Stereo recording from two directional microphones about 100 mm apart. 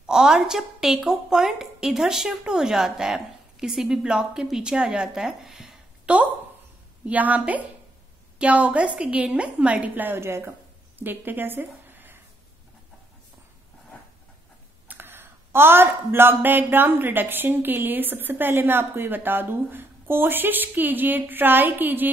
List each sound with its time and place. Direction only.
0.0 s a woman's voice: 5° right (ahead or behind)
7.1 s a woman's voice: 15° right (ahead or behind)
14.9 s speech: 20° right (ahead or behind)